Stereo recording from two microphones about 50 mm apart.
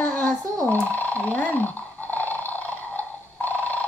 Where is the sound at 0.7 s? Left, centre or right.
Left.